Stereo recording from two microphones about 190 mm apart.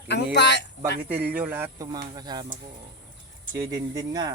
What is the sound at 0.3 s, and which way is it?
Speech, 65° left (ahead or behind).